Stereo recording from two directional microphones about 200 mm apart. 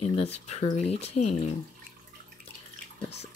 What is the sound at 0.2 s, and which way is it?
Speech, 30° left (ahead or behind).